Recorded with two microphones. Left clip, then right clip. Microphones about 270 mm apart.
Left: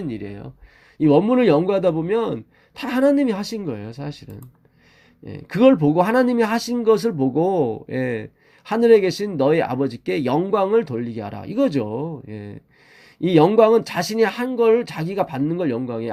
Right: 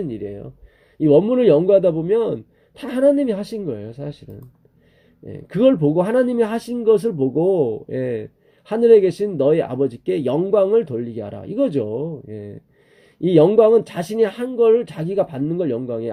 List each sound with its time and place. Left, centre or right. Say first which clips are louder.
0.1 s speech: right 3 dB; left